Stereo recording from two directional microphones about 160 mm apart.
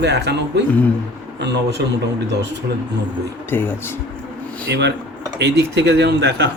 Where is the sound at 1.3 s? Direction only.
90° right.